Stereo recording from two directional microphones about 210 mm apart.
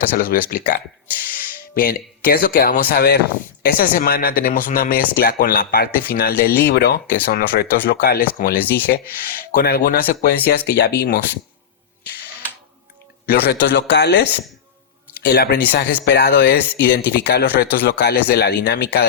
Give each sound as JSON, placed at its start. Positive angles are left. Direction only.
{"t": 0.2, "sound": "speech", "side_deg": 45}
{"t": 1.8, "sound": "speech", "side_deg": 45}
{"t": 13.2, "sound": "speech", "side_deg": 55}
{"t": 15.3, "sound": "speech", "side_deg": 50}